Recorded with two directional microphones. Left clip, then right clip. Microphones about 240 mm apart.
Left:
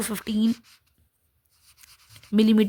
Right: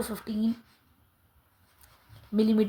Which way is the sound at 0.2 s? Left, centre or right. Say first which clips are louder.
Left 6 dB; left.